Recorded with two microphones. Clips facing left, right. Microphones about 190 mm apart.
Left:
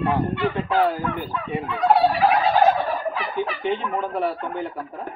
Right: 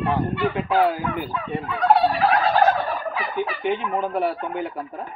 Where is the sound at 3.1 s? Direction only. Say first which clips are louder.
Even; centre (ahead or behind).